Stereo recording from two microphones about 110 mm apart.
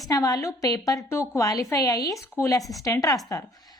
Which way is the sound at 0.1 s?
30° left (ahead or behind).